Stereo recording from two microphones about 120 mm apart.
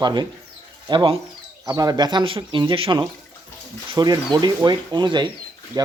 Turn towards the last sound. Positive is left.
turn(degrees=-35)  # may be behind; listen again after turning